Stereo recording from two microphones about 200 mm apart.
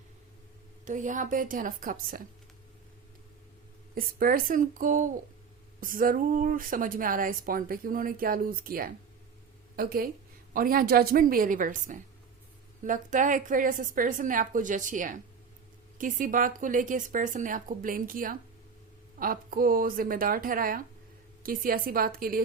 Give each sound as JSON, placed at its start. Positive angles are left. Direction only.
{"t": 0.9, "sound": "a woman's voice", "side_deg": -40}
{"t": 3.9, "sound": "a woman's voice", "side_deg": -45}